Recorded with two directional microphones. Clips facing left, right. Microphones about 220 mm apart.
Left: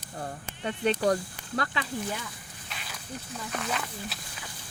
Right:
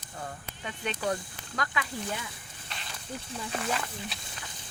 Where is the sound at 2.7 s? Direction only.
5° left (ahead or behind).